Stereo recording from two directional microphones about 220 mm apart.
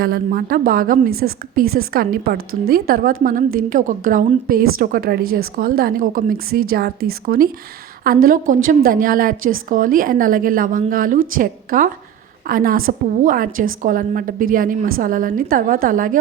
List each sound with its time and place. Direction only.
0.0 s a woman's voice: 40° right (ahead or behind)